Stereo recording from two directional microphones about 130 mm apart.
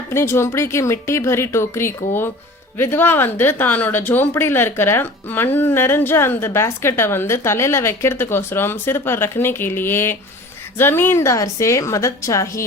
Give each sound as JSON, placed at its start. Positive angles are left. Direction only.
{"t": 0.1, "sound": "speech", "side_deg": 20}